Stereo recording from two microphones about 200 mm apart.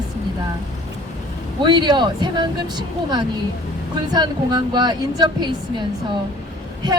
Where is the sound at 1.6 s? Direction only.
20° right (ahead or behind).